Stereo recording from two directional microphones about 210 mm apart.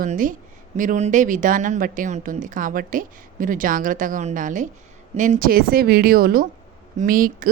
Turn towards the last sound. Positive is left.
turn(degrees=-40)  # may be behind; listen again after turning